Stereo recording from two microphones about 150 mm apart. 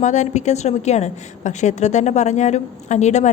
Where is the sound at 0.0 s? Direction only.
50° left (ahead or behind).